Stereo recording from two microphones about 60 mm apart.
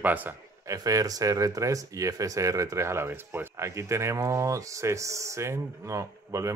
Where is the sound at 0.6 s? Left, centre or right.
Right.